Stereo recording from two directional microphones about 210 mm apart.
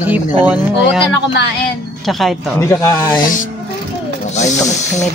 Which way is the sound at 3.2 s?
40° left (ahead or behind).